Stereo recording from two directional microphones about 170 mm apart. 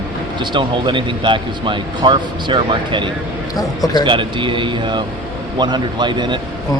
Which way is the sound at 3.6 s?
20° left (ahead or behind).